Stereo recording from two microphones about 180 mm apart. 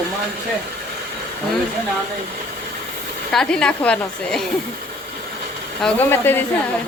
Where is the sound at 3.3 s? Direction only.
5° left (ahead or behind).